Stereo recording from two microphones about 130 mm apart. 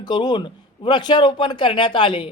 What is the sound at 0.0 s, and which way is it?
A man's voice, 35° left (ahead or behind).